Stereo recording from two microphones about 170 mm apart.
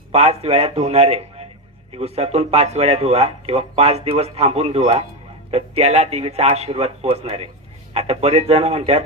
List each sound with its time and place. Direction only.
0.1 s speech: 40° right (ahead or behind)